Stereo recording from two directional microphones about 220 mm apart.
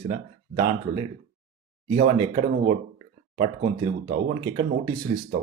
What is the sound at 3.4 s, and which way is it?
Speech, 30° right (ahead or behind).